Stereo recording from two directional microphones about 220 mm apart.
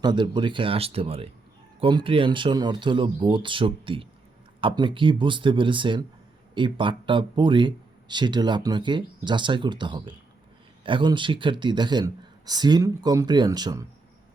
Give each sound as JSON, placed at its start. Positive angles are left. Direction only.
{"t": 0.0, "sound": "speech", "side_deg": -20}